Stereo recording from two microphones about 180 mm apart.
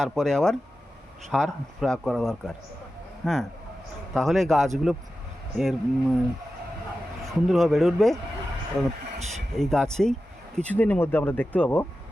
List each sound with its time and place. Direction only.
0.0 s speech: 5° left (ahead or behind)
7.3 s speech: centre (ahead or behind)
9.6 s speech: 5° left (ahead or behind)